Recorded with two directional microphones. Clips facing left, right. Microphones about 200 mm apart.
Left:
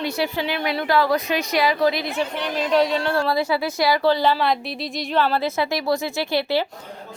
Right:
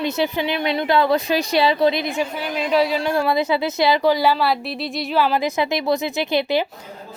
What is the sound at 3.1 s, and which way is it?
Speech, 20° right (ahead or behind).